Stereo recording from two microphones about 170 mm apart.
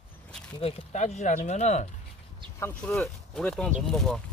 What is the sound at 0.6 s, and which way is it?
Speech, 40° left (ahead or behind).